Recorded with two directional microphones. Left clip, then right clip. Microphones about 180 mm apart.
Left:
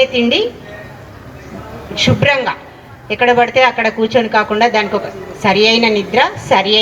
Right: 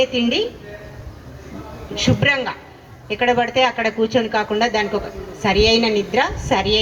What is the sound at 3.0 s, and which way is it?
A woman's voice, 45° left (ahead or behind).